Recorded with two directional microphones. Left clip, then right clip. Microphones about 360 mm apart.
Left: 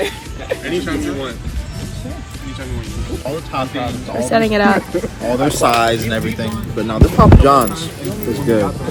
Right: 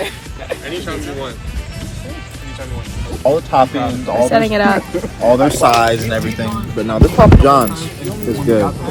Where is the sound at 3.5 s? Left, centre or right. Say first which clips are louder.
Right 5 dB; centre.